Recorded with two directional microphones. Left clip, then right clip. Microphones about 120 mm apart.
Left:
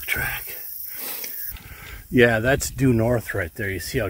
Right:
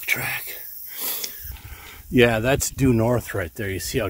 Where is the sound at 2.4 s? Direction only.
15° right (ahead or behind).